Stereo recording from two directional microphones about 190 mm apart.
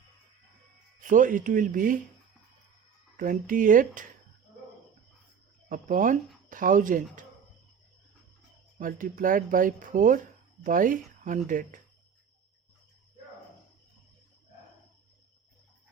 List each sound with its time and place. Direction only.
1.0 s speech: 45° right (ahead or behind)
3.2 s speech: 45° right (ahead or behind)
5.6 s speech: 45° right (ahead or behind)
8.8 s speech: 45° right (ahead or behind)